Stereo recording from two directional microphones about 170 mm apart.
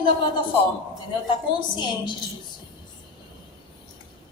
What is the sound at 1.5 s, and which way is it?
Speech, 25° left (ahead or behind).